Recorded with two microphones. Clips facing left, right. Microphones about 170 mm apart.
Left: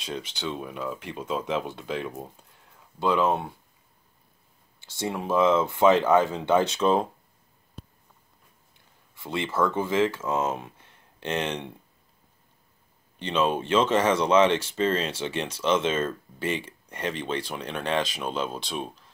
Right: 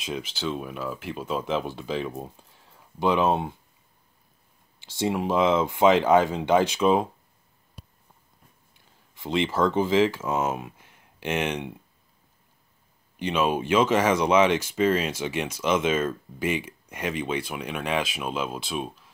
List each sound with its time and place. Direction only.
0.0 s speech: 5° right (ahead or behind)
3.0 s speech: 20° right (ahead or behind)
4.7 s speech: 20° right (ahead or behind)
9.1 s speech: 20° right (ahead or behind)
13.2 s speech: 10° right (ahead or behind)